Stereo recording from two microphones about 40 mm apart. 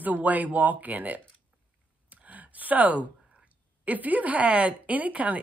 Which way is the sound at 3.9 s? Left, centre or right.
Right.